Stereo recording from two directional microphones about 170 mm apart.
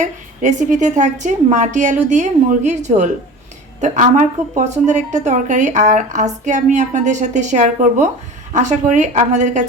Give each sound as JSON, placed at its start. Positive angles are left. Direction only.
{"t": 0.0, "sound": "a woman's voice", "side_deg": -45}